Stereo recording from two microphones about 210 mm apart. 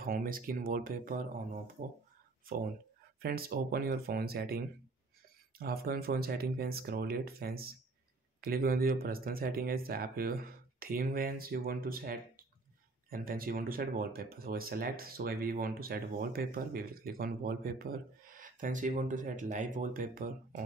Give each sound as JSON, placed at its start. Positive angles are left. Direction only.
{"t": 0.0, "sound": "speech", "side_deg": -40}
{"t": 3.2, "sound": "speech", "side_deg": -45}